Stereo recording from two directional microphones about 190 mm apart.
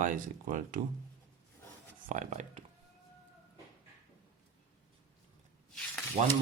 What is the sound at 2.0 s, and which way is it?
Speech, 45° right (ahead or behind).